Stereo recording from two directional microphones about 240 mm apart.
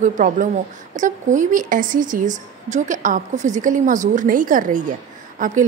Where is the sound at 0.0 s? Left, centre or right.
Right.